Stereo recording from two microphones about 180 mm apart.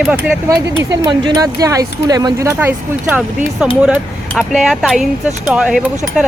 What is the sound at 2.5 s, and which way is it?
Speech, 10° right (ahead or behind).